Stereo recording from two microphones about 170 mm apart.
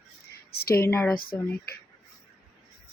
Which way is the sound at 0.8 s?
15° left (ahead or behind).